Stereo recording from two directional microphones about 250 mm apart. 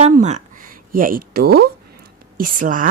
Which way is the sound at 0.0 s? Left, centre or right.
Right.